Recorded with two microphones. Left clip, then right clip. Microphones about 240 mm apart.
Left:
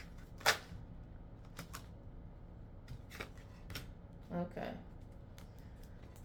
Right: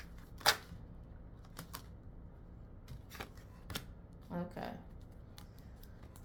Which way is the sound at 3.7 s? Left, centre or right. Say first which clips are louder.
Right 4 dB; right.